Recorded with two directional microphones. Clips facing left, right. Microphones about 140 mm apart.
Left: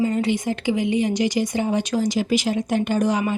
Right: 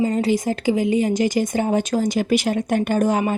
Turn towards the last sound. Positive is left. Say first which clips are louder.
# right 2 dB
turn(degrees=-50)  # may be behind; listen again after turning